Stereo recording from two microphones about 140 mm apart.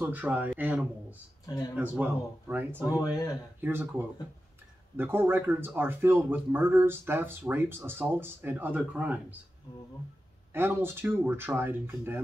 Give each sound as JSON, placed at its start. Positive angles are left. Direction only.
{"t": 0.0, "sound": "a man's voice", "side_deg": -10}
{"t": 3.0, "sound": "speech", "side_deg": 25}
{"t": 3.6, "sound": "a man's voice", "side_deg": -15}
{"t": 10.5, "sound": "a man's voice", "side_deg": -15}